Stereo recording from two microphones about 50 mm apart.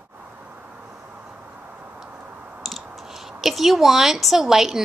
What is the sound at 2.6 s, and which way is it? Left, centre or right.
A woman's voice, centre.